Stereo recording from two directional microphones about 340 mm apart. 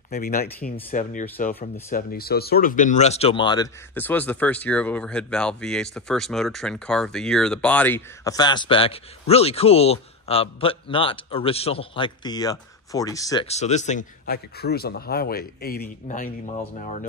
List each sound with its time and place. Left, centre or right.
0.1 s speech: left